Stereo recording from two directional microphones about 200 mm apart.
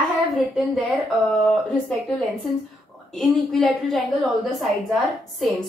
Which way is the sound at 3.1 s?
Centre (ahead or behind).